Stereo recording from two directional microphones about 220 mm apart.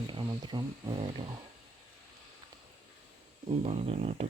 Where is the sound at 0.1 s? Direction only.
20° right (ahead or behind).